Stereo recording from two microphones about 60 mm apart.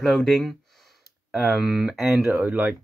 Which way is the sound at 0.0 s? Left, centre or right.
Centre.